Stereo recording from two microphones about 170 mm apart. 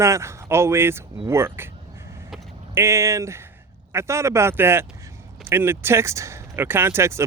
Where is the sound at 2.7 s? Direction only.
15° right (ahead or behind).